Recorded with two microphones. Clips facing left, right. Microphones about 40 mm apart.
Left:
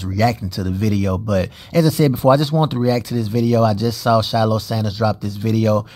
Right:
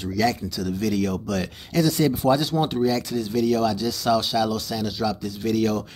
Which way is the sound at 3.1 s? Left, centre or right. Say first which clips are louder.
Left 4 dB; centre.